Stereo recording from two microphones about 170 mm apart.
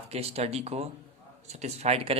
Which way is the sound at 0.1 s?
35° right (ahead or behind).